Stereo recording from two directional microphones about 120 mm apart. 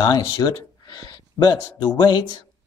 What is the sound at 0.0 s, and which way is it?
Speech, 35° left (ahead or behind).